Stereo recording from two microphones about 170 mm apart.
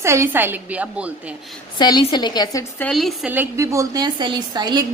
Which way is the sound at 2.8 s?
Centre (ahead or behind).